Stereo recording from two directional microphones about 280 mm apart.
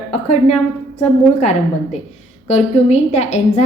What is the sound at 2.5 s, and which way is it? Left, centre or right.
A woman's voice, left.